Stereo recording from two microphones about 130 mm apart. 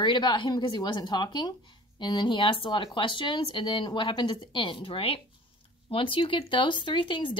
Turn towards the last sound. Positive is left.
turn(degrees=40)  # may be behind; listen again after turning